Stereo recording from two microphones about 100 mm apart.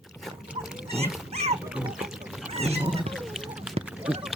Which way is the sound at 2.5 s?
90° right.